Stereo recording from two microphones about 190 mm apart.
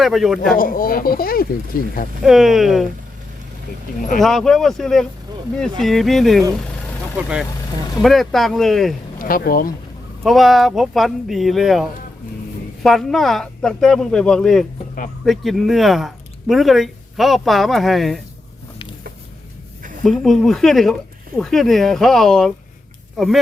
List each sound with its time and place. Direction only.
0.0 s speech: centre (ahead or behind)
0.5 s speech: 50° left (ahead or behind)
2.2 s speech: centre (ahead or behind)
4.2 s speech: centre (ahead or behind)
8.0 s speech: centre (ahead or behind)
9.1 s speech: 50° left (ahead or behind)
10.2 s speech: centre (ahead or behind)
20.1 s speech: centre (ahead or behind)